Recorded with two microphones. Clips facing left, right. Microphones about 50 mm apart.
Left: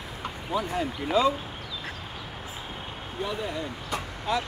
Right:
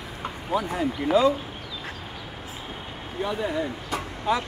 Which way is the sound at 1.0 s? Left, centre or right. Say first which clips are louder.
Right 8 dB; right.